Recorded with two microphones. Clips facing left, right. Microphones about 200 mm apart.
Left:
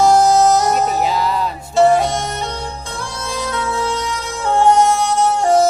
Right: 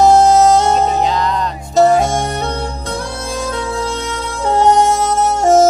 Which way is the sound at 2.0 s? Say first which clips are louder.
Right 3 dB; 50° right (ahead or behind).